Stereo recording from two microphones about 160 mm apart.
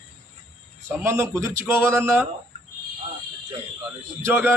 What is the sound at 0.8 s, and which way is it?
A man's voice, 15° right (ahead or behind).